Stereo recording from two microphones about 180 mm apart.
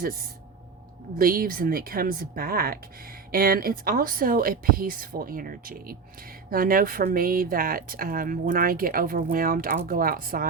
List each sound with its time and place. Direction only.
0.0 s speech: 55° right (ahead or behind)